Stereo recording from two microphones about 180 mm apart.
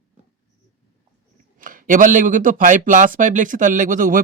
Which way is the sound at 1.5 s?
50° right (ahead or behind).